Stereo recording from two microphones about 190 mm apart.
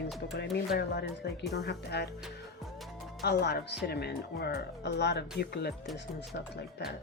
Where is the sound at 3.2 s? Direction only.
60° left (ahead or behind).